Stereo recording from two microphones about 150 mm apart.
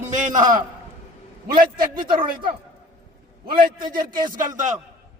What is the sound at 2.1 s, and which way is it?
Speech, 35° right (ahead or behind).